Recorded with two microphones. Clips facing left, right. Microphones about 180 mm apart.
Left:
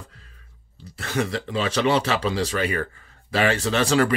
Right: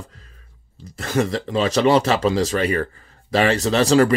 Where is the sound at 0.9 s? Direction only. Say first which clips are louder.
Right 5 dB; 40° right (ahead or behind).